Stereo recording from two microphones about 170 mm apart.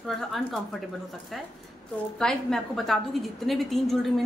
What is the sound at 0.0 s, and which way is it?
Speech, centre (ahead or behind).